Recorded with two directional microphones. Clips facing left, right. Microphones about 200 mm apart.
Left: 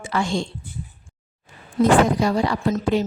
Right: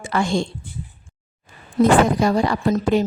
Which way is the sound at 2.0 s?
50° right (ahead or behind).